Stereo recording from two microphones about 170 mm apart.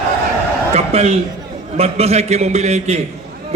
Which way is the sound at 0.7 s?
40° right (ahead or behind).